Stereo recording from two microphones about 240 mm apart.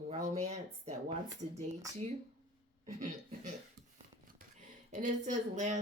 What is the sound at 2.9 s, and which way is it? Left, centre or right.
Speech, right.